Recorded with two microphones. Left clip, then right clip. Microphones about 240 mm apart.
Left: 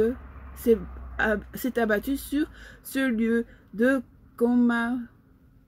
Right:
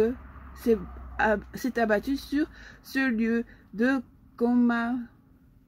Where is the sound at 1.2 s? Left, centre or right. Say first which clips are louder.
Right 1 dB; centre.